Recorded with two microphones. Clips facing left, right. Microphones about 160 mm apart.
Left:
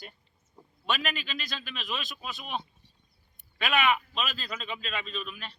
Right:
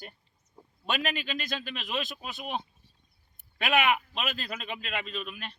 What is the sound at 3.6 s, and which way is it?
A man's voice, 50° right (ahead or behind).